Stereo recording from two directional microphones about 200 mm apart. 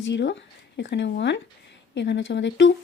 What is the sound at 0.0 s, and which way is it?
Speech, 60° left (ahead or behind).